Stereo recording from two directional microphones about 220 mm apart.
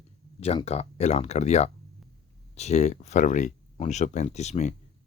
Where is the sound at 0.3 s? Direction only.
30° left (ahead or behind).